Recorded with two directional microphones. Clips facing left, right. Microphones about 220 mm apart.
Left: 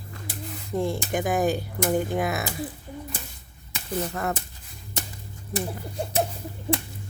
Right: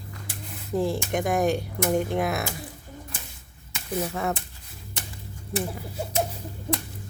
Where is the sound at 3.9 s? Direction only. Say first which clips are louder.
Right 1 dB; 5° right (ahead or behind).